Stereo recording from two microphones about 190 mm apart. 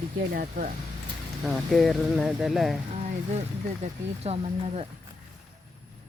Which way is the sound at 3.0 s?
35° right (ahead or behind).